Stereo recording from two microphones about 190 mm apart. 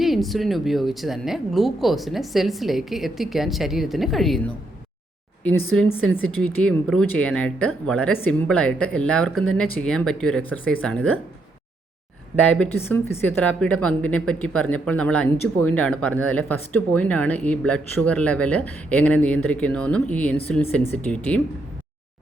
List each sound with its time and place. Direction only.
0.0 s speech: centre (ahead or behind)
5.4 s speech: 5° left (ahead or behind)
12.5 s a woman's voice: 5° left (ahead or behind)